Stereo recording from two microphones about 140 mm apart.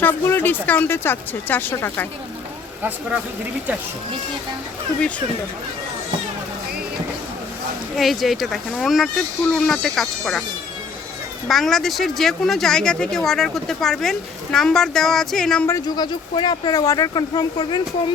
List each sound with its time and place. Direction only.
0.0 s speech: 15° left (ahead or behind)
7.9 s speech: centre (ahead or behind)
11.4 s speech: centre (ahead or behind)
15.6 s speech: 20° left (ahead or behind)
16.3 s speech: 30° left (ahead or behind)